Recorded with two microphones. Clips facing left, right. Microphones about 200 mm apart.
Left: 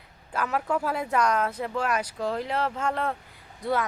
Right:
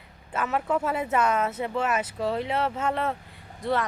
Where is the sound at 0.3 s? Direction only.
5° right (ahead or behind).